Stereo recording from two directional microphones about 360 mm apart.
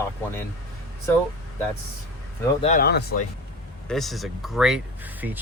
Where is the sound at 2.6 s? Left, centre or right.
Left.